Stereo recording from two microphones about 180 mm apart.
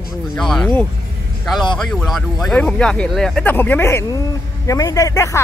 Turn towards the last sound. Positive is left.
turn(degrees=15)  # may be behind; listen again after turning